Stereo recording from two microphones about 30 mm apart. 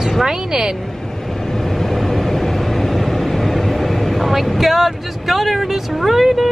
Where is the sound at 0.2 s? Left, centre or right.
Centre.